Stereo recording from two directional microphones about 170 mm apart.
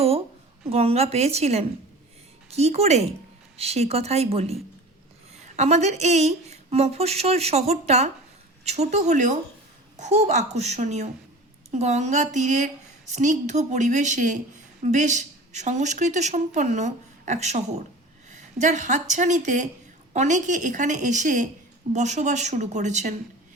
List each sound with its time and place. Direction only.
0.7 s a woman's voice: 35° right (ahead or behind)